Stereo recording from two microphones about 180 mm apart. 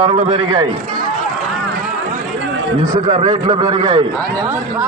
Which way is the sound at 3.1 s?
30° right (ahead or behind).